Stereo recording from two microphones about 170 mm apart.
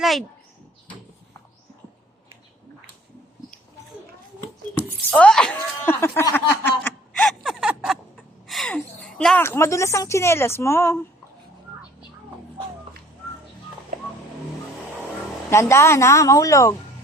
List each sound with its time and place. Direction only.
0.0 s speech: centre (ahead or behind)
5.1 s a sound: 5° left (ahead or behind)
15.4 s a woman's voice: 15° left (ahead or behind)